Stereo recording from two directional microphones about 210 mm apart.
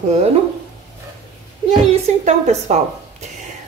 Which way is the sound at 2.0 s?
30° right (ahead or behind).